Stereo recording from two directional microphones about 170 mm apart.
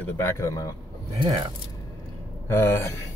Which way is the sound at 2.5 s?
15° left (ahead or behind).